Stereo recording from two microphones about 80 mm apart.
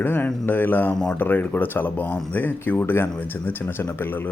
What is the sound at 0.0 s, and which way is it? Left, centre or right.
Speech, left.